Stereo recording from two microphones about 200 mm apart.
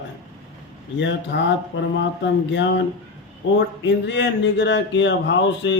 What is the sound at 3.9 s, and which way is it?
A man's voice, 65° left (ahead or behind).